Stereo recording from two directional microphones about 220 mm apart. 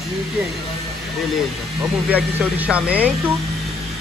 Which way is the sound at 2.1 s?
5° right (ahead or behind).